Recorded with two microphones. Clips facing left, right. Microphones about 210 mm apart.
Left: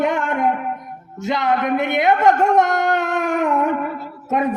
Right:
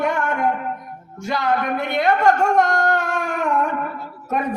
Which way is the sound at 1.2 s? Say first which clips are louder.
Left 2 dB; 20° left (ahead or behind).